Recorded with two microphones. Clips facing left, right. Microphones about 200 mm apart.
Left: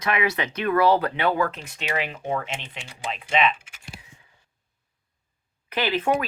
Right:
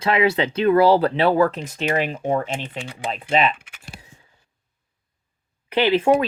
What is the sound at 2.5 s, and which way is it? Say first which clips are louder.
Speech: right 7 dB; 55° right (ahead or behind).